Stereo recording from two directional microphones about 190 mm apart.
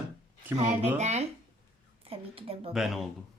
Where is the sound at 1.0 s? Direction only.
35° right (ahead or behind).